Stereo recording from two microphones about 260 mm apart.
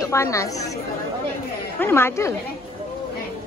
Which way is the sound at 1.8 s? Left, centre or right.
Centre.